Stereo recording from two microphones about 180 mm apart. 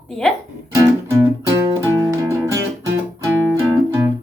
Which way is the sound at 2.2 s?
15° right (ahead or behind).